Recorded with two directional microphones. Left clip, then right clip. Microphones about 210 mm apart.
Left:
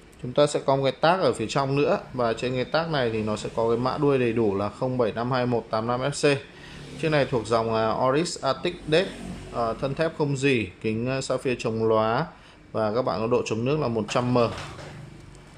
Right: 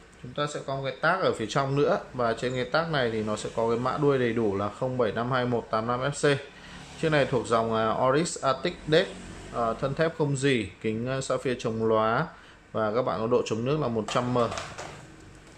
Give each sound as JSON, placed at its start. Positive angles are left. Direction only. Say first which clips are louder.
{"t": 0.3, "sound": "speech", "louder": "left 10 dB", "side_deg": 25}
{"t": 1.1, "sound": "speech", "louder": "left 2 dB", "side_deg": 5}